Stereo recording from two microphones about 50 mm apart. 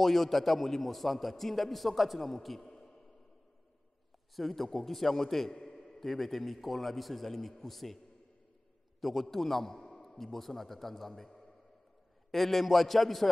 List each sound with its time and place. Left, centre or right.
0.0 s a man's voice: centre
4.4 s a man's voice: centre
5.9 s a man's voice: centre
9.0 s a man's voice: centre